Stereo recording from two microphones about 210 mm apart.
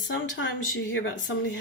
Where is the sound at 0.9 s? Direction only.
65° left (ahead or behind).